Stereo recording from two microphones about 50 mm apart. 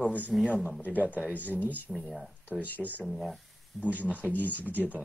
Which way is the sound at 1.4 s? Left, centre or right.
Left.